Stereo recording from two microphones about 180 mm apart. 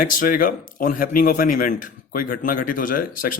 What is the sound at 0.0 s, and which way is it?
Speech, 50° left (ahead or behind).